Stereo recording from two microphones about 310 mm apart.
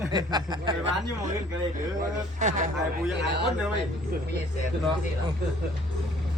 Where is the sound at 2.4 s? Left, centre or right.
Right.